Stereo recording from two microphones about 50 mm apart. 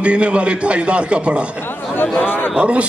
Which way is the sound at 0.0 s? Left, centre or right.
Right.